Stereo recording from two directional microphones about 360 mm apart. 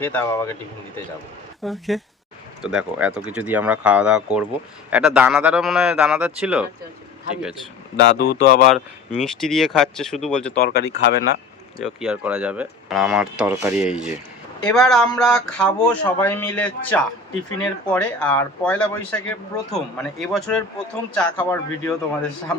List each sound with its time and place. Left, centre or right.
0.0 s speech: centre
1.6 s speech: centre
8.1 s speech: left
8.7 s speech: centre
10.6 s speech: left
11.8 s speech: centre